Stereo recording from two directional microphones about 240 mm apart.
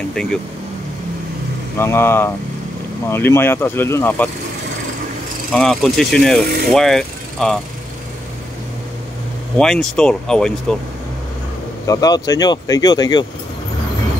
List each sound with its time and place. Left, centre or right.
1.8 s speech: centre
5.5 s speech: centre
9.6 s speech: centre
11.8 s speech: centre